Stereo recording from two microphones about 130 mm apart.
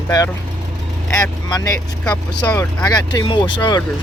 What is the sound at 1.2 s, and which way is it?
Speech, 30° left (ahead or behind).